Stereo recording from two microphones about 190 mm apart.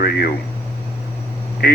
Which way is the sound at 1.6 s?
55° left (ahead or behind).